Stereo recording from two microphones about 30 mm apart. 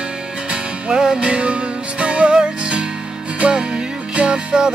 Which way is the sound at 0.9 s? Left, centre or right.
Right.